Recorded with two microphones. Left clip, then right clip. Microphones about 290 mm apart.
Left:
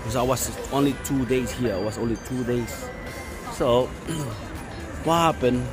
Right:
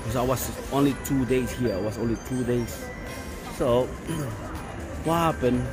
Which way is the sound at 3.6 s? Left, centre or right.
Centre.